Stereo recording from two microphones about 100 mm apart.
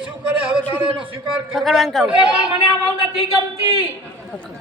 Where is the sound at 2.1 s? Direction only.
10° right (ahead or behind).